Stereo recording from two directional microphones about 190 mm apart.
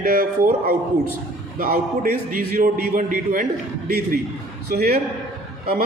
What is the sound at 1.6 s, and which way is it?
A man's voice, 50° right (ahead or behind).